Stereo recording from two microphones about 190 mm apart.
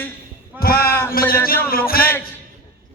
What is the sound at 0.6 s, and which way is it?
A man's voice, 50° left (ahead or behind).